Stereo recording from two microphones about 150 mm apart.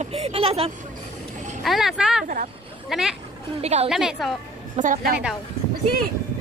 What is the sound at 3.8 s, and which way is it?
Speech, 5° right (ahead or behind).